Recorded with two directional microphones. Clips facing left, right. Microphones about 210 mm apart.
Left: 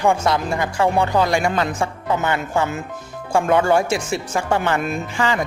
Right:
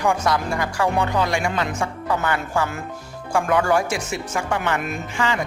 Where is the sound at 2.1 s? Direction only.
25° left (ahead or behind).